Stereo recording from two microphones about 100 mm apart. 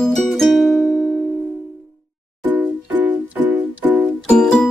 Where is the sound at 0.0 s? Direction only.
5° left (ahead or behind).